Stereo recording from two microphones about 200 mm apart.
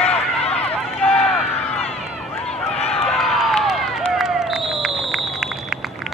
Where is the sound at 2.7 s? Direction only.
30° left (ahead or behind).